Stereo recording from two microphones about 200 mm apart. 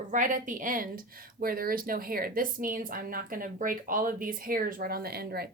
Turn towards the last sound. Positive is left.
turn(degrees=-50)  # may be behind; listen again after turning